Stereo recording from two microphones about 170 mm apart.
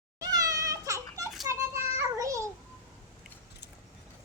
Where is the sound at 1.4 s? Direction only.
20° right (ahead or behind).